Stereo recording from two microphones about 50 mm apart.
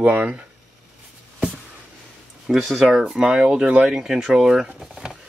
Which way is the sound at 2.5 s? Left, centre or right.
Centre.